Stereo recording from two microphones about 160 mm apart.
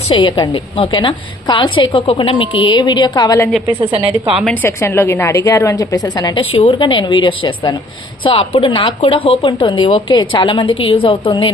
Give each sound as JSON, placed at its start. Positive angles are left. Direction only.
{"t": 0.1, "sound": "a woman's voice", "side_deg": 30}
{"t": 3.9, "sound": "a woman's voice", "side_deg": -35}
{"t": 4.5, "sound": "a woman's voice", "side_deg": 15}
{"t": 6.4, "sound": "a woman's voice", "side_deg": 40}